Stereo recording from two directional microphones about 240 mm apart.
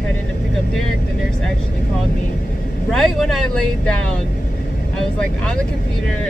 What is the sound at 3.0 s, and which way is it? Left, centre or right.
Speech, centre.